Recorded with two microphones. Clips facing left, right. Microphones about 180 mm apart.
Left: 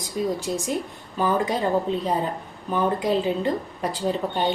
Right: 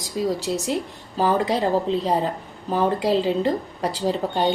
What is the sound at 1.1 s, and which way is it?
Speech, 35° right (ahead or behind).